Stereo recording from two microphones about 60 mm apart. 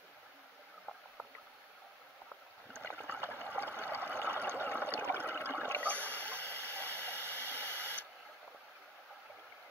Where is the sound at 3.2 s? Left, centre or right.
Right.